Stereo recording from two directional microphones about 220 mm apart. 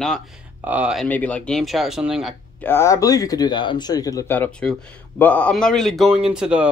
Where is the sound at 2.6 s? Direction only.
10° left (ahead or behind).